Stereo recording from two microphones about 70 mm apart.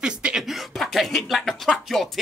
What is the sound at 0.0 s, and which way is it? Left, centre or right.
Speech, centre.